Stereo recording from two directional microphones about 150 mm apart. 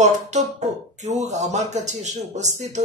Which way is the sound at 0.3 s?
50° right (ahead or behind).